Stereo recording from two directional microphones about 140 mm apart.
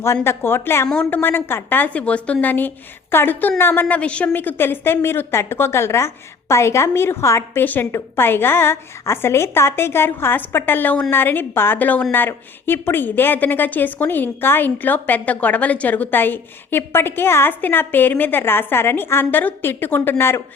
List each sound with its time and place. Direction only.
0.0 s a woman's voice: 20° left (ahead or behind)